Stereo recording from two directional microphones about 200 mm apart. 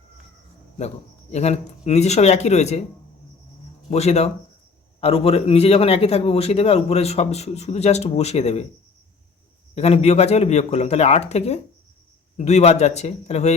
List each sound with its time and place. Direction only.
1.3 s a man's voice: 35° left (ahead or behind)
3.8 s a man's voice: 30° left (ahead or behind)
9.7 s a man's voice: 30° left (ahead or behind)